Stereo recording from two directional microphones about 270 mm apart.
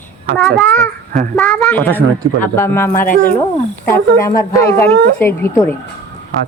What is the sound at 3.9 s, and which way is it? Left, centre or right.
Speech, centre.